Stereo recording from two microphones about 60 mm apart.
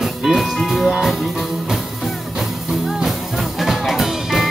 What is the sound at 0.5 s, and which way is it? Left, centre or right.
Speech, centre.